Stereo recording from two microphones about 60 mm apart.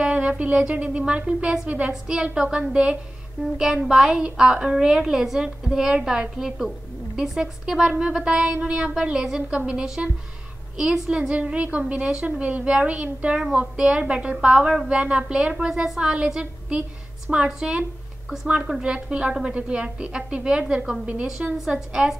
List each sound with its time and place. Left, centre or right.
0.1 s a woman's voice: right
11.1 s a woman's voice: centre
21.5 s a woman's voice: centre